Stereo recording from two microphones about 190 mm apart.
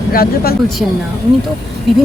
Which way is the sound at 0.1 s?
50° left (ahead or behind).